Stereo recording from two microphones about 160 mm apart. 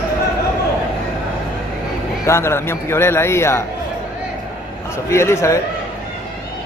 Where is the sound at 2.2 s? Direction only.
15° left (ahead or behind).